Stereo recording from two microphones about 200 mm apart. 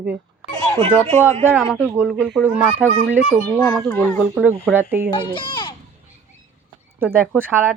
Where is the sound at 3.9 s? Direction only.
10° left (ahead or behind).